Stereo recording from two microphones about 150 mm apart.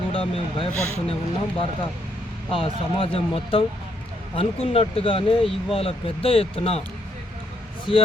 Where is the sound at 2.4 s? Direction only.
40° left (ahead or behind).